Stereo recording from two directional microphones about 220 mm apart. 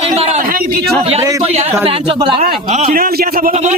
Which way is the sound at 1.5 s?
30° right (ahead or behind).